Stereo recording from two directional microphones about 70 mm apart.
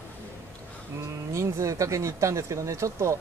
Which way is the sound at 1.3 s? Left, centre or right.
Right.